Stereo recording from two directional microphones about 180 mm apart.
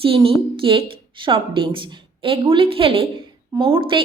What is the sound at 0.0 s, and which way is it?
A woman's voice, 30° right (ahead or behind).